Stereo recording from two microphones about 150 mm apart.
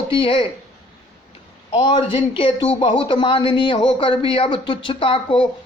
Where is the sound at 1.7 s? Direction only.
30° left (ahead or behind).